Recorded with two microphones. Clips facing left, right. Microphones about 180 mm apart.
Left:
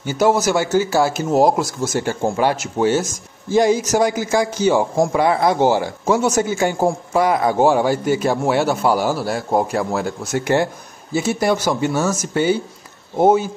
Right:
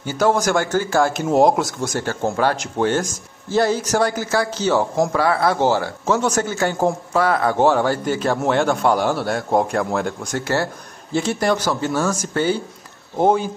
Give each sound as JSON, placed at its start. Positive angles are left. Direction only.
{"t": 0.0, "sound": "a man's voice", "side_deg": 10}
{"t": 2.0, "sound": "a man's voice", "side_deg": 15}
{"t": 10.4, "sound": "a man's voice", "side_deg": 15}